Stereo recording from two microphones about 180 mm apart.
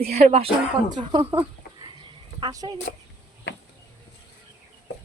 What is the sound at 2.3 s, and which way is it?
Speech, 25° right (ahead or behind).